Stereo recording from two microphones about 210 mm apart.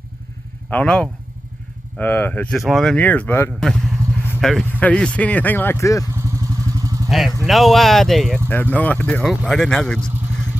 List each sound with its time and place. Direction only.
0.7 s speech: 5° left (ahead or behind)
6.1 s vehicle: 15° right (ahead or behind)
7.1 s speech: centre (ahead or behind)